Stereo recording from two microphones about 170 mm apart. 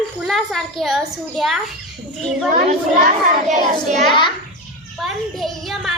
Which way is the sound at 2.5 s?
45° right (ahead or behind).